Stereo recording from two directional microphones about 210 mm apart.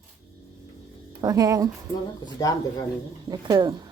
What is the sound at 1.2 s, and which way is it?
Speech, 15° right (ahead or behind).